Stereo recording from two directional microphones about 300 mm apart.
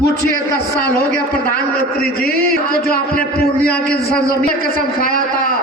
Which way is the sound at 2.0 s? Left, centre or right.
Left.